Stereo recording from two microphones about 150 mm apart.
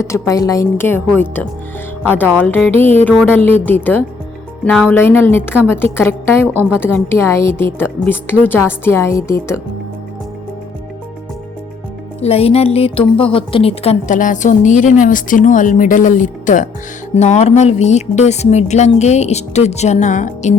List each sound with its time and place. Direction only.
0.0 s a woman's voice: 20° left (ahead or behind)
6.5 s a woman's voice: 15° right (ahead or behind)
6.7 s a woman's voice: 15° left (ahead or behind)
12.2 s a woman's voice: 40° left (ahead or behind)
14.1 s speech: 60° left (ahead or behind)